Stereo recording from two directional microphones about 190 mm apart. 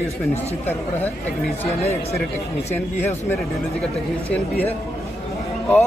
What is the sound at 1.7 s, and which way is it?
Speech, 35° left (ahead or behind).